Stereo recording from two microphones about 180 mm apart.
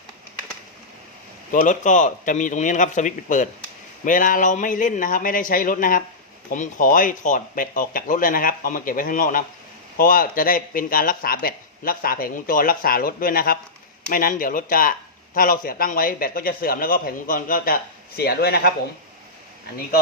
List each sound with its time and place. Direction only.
1.6 s speech: 45° left (ahead or behind)
18.2 s speech: 60° left (ahead or behind)